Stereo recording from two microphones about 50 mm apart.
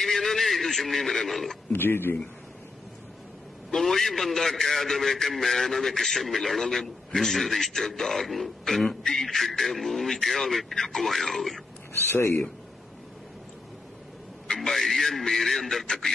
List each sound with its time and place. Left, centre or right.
0.0 s a man's voice: centre
1.7 s speech: left
3.7 s a man's voice: centre
11.9 s speech: left
14.7 s a man's voice: centre